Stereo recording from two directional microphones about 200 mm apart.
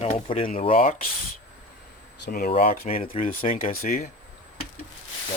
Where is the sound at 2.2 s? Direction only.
50° left (ahead or behind).